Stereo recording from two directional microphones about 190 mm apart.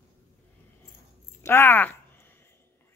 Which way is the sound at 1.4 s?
10° left (ahead or behind).